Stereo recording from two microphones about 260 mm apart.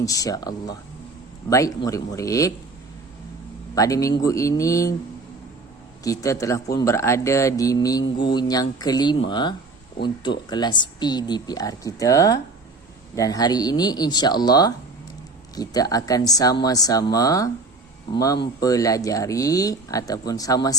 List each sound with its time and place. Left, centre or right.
0.0 s speech: centre
3.8 s speech: centre
6.0 s speech: centre